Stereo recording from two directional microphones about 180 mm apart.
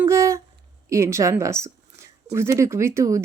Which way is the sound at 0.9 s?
15° right (ahead or behind).